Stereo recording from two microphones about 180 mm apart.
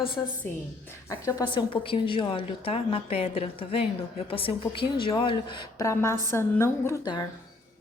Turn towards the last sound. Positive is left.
turn(degrees=20)  # may be behind; listen again after turning